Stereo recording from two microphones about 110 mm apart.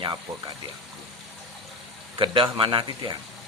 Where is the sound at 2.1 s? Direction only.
50° right (ahead or behind).